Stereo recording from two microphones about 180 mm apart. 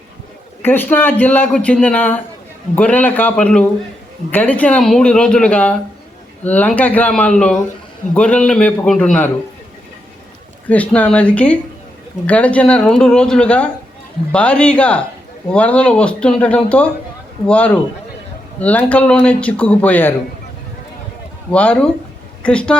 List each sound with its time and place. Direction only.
0.6 s speech: 10° left (ahead or behind)
10.7 s speech: 10° left (ahead or behind)
21.5 s a woman's voice: 5° left (ahead or behind)